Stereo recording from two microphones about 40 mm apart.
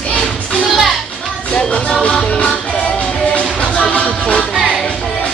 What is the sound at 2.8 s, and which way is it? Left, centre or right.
Music, left.